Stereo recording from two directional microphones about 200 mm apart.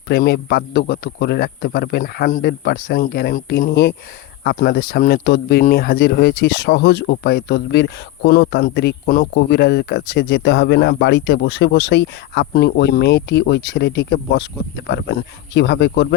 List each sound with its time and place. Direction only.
0.1 s speech: 50° left (ahead or behind)
9.3 s speech: 55° left (ahead or behind)